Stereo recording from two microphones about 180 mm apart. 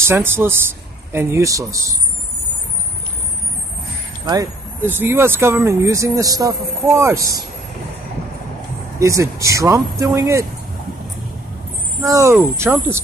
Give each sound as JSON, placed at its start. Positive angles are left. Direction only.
{"t": 0.0, "sound": "speech", "side_deg": -10}
{"t": 4.8, "sound": "speech", "side_deg": -10}
{"t": 9.0, "sound": "speech", "side_deg": -15}
{"t": 12.0, "sound": "speech", "side_deg": -15}